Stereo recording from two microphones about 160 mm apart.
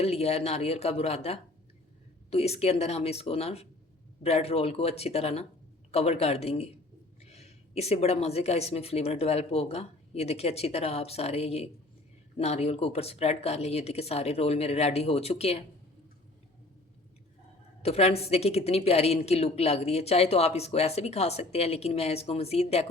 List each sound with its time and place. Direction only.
0.0 s a woman's voice: 40° left (ahead or behind)
17.8 s a woman's voice: 40° left (ahead or behind)